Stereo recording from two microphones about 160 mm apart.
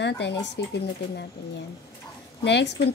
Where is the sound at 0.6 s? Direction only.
90° left.